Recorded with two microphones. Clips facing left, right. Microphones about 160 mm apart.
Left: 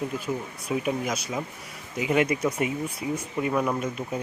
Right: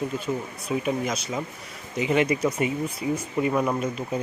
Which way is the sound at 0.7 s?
5° left (ahead or behind).